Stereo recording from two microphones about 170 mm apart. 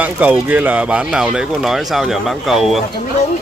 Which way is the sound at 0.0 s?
10° right (ahead or behind).